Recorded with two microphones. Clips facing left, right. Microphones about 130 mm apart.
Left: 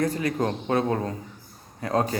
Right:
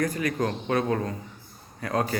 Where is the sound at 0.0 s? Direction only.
25° left (ahead or behind).